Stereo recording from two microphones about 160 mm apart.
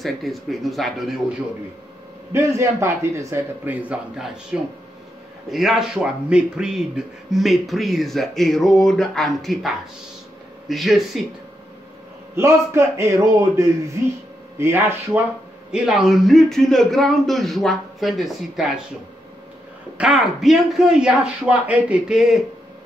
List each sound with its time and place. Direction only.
0.0 s speech: centre (ahead or behind)
2.3 s a man's voice: 15° right (ahead or behind); by 11.2 s centre (ahead or behind)
12.4 s a man's voice: 15° right (ahead or behind)
15.7 s speech: 5° right (ahead or behind)
20.0 s speech: 5° right (ahead or behind)